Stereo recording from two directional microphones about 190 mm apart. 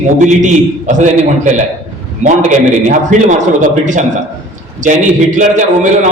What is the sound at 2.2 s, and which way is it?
A man's voice, 40° right (ahead or behind).